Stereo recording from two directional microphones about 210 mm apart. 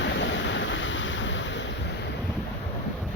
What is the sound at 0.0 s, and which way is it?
Waves, 60° left (ahead or behind).